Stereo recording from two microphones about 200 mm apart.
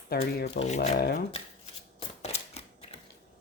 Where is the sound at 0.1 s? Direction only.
50° left (ahead or behind).